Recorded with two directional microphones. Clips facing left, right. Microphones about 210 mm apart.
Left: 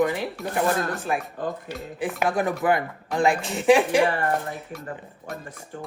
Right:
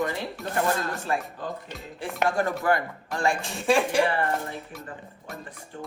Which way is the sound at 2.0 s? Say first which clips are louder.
Left 2 dB; centre (ahead or behind).